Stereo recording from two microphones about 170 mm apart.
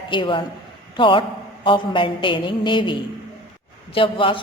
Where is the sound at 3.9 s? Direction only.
30° left (ahead or behind).